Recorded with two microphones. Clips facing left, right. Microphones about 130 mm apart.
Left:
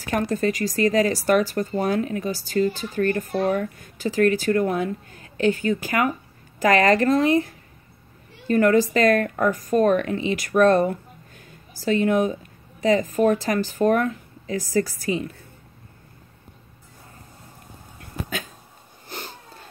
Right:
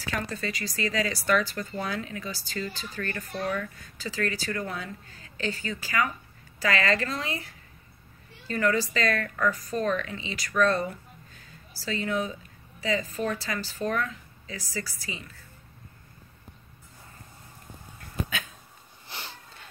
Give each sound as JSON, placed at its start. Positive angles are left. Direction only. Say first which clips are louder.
{"t": 0.0, "sound": "speech", "louder": "left 10 dB", "side_deg": 45}
{"t": 19.0, "sound": "sniff", "louder": "left 5 dB", "side_deg": 45}